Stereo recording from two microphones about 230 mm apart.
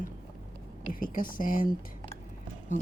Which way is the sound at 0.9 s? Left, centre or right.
Left.